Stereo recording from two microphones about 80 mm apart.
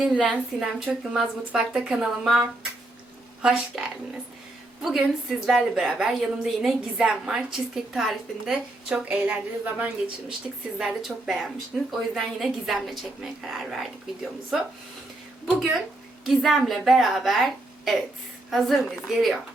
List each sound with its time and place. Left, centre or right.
0.0 s a woman's voice: centre
0.3 s a woman's voice: centre
3.4 s a woman's voice: centre
10.8 s a woman's voice: centre